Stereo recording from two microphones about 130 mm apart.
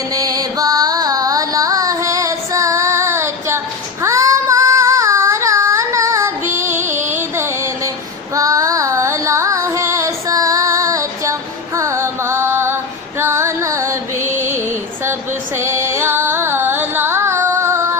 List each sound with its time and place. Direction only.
0.1 s music: 30° right (ahead or behind)
4.0 s child singing: 25° right (ahead or behind)
8.3 s music: 25° right (ahead or behind)